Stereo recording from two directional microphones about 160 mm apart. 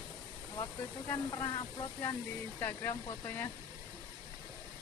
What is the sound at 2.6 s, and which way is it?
Speech, 15° left (ahead or behind).